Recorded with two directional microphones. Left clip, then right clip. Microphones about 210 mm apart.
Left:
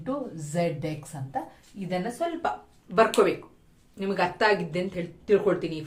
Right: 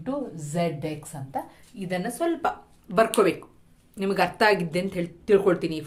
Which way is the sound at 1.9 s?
55° right (ahead or behind).